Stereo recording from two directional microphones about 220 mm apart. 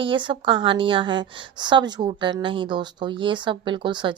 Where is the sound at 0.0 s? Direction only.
20° right (ahead or behind).